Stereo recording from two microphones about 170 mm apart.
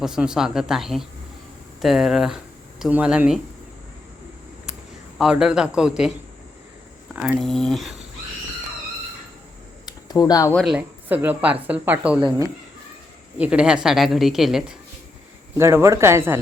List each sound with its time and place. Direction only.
0.0 s a woman's voice: 5° right (ahead or behind)
5.1 s a woman's voice: 5° right (ahead or behind)
7.3 s a woman's voice: centre (ahead or behind)
9.8 s a sound: 25° left (ahead or behind)
10.5 s speech: centre (ahead or behind)
13.4 s a woman's voice: 5° right (ahead or behind)
15.5 s speech: 15° right (ahead or behind)